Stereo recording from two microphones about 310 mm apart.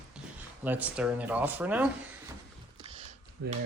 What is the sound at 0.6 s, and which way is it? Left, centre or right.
Speech, centre.